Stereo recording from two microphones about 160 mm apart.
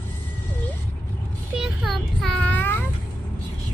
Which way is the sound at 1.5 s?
Centre (ahead or behind).